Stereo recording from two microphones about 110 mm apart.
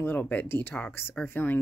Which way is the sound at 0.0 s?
15° left (ahead or behind).